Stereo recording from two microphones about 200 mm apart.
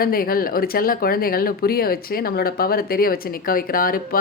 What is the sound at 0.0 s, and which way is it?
Speech, 45° left (ahead or behind).